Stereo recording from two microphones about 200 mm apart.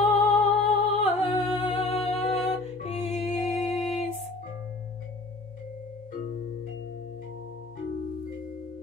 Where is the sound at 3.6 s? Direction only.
Centre (ahead or behind).